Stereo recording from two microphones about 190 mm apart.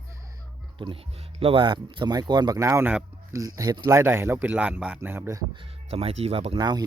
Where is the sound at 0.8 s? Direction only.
25° right (ahead or behind).